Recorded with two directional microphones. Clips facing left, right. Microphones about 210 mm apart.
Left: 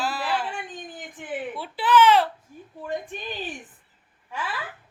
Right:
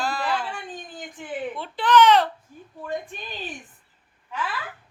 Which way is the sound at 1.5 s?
5° left (ahead or behind).